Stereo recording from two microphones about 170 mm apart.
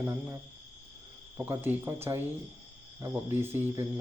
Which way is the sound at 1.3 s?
10° right (ahead or behind).